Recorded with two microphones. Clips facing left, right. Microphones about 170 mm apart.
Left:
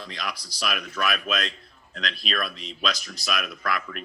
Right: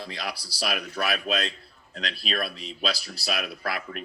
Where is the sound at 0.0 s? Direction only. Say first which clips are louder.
Even; 30° right (ahead or behind).